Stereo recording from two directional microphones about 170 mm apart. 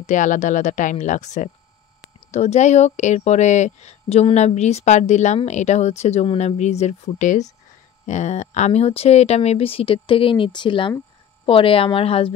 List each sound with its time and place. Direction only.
0.0 s speech: 50° left (ahead or behind)